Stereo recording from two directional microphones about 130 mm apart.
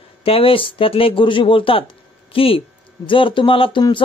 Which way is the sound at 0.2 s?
45° left (ahead or behind).